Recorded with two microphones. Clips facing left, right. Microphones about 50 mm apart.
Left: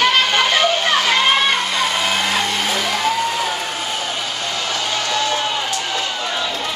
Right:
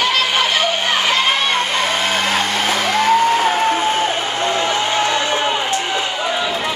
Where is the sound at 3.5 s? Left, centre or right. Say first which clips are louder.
Right 8 dB; right.